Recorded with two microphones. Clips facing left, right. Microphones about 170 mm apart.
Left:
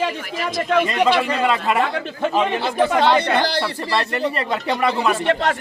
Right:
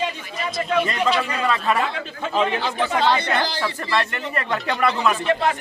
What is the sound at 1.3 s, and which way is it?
Speech, 25° left (ahead or behind).